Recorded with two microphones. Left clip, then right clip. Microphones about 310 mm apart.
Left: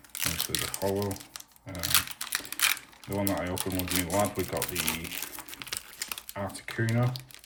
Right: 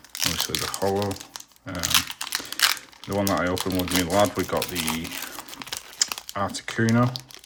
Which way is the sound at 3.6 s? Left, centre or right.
Centre.